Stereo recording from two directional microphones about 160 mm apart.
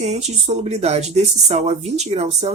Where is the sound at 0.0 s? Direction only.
45° right (ahead or behind).